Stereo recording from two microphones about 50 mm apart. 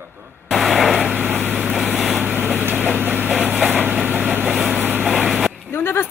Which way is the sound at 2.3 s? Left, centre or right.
Right.